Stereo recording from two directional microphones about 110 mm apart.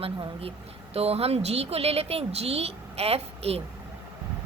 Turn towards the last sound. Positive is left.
turn(degrees=-65)  # may be behind; listen again after turning